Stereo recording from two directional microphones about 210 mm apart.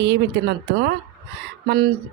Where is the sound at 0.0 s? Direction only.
55° right (ahead or behind).